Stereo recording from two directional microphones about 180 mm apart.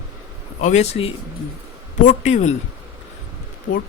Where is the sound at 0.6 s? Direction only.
40° left (ahead or behind).